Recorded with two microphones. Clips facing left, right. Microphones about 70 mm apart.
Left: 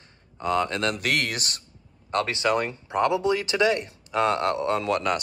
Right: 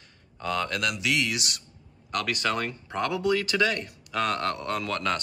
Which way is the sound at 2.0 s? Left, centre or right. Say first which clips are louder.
Left 4 dB; left.